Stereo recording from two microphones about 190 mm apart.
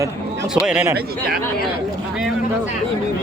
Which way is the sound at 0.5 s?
5° right (ahead or behind).